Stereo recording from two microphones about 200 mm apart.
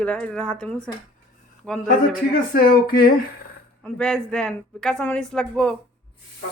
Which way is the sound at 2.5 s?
45° left (ahead or behind).